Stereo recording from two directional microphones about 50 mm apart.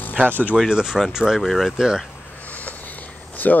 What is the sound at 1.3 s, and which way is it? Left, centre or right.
Speech, centre.